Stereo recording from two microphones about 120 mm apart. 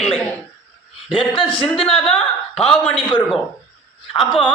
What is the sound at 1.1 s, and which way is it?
Speech, 45° left (ahead or behind).